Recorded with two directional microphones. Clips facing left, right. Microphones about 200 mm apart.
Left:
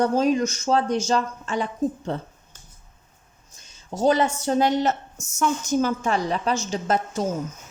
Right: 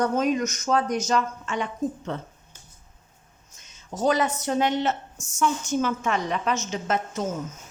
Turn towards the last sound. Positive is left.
turn(degrees=35)  # may be behind; listen again after turning